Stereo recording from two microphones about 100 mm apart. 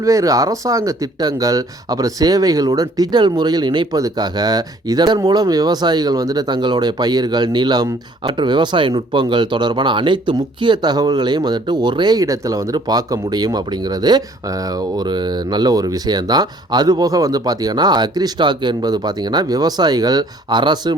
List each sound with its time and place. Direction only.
0.0 s speech: 35° right (ahead or behind); by 20.9 s 50° right (ahead or behind)